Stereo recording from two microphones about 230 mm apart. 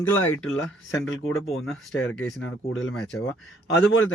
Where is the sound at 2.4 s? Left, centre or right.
Left.